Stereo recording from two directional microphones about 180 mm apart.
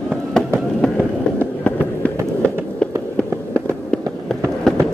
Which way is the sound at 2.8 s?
5° left (ahead or behind).